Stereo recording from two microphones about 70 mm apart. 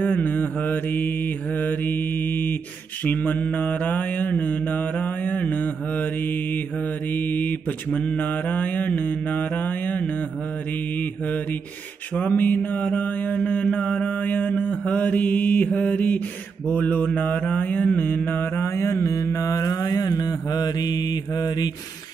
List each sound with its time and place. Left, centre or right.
0.1 s mantra: left
7.2 s mantra: left
12.2 s mantra: left